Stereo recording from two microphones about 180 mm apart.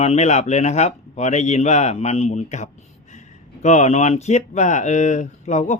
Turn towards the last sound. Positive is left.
turn(degrees=40)  # may be behind; listen again after turning